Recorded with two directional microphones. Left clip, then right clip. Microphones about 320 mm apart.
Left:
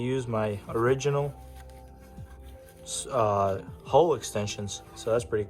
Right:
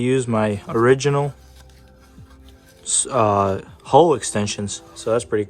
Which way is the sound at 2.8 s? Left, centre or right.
Right.